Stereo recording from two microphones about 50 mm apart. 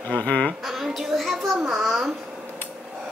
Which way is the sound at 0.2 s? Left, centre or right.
Left.